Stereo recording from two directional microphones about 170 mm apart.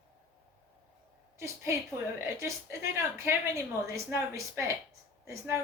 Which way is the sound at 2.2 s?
15° right (ahead or behind).